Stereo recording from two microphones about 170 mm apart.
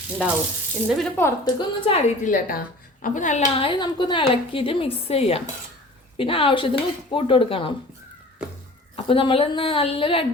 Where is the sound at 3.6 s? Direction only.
25° left (ahead or behind).